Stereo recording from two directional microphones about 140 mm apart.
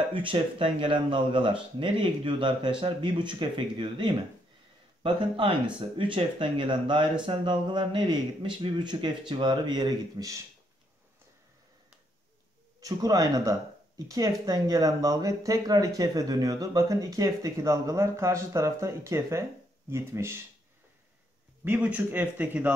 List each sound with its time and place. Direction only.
0.1 s speech: 40° right (ahead or behind)
12.8 s speech: 25° right (ahead or behind)
21.6 s a man's voice: 10° right (ahead or behind)